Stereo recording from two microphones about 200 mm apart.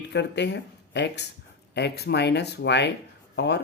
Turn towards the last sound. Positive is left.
turn(degrees=60)  # may be behind; listen again after turning